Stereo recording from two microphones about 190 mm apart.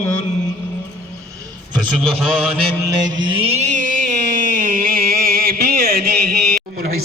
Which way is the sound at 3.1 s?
25° right (ahead or behind).